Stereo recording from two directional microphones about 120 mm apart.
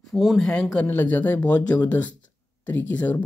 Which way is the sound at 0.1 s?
Centre (ahead or behind).